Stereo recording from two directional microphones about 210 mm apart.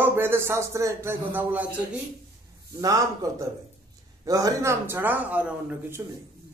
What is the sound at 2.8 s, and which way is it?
Speech, 15° right (ahead or behind).